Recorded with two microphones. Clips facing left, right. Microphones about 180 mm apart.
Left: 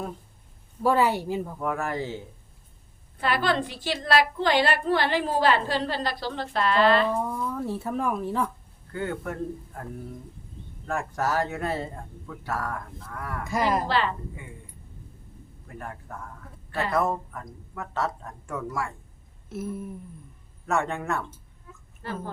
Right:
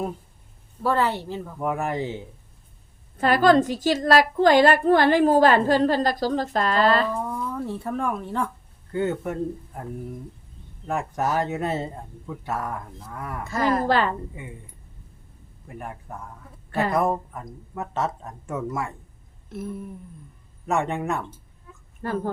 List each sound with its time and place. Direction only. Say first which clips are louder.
0.8 s speech: left 1 dB; 10° left (ahead or behind)
1.5 s speech: right 3 dB; 15° right (ahead or behind)
3.2 s a woman's voice: right 8 dB; 45° right (ahead or behind)
7.2 s speech: even; centre (ahead or behind)
8.9 s speech: right 5 dB; 20° right (ahead or behind)
13.4 s speech: right 2 dB; 15° left (ahead or behind)
13.8 s a woman's voice: right 4 dB; 45° right (ahead or behind)
15.6 s speech: right 2 dB; 15° right (ahead or behind)
20.7 s speech: right 2 dB; 20° right (ahead or behind)
22.0 s speech: right 7 dB; 45° right (ahead or behind)